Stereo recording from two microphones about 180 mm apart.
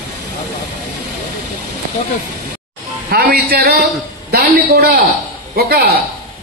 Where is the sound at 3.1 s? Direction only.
55° right (ahead or behind).